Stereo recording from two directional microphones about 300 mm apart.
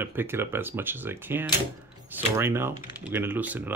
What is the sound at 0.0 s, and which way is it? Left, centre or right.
Speech, centre.